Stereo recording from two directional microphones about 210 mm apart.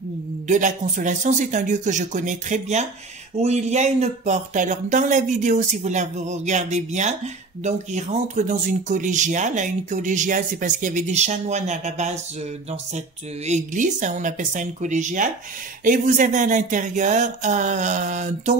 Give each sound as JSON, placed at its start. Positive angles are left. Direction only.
{"t": 0.5, "sound": "speech", "side_deg": -35}
{"t": 13.5, "sound": "speech", "side_deg": -35}